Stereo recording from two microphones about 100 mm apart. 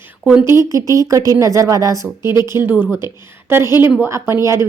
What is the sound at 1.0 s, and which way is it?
A woman's voice, 35° right (ahead or behind).